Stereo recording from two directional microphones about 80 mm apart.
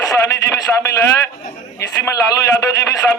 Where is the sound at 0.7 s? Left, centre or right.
Centre.